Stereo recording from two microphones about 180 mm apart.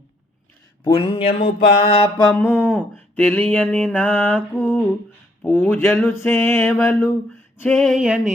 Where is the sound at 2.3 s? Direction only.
10° left (ahead or behind).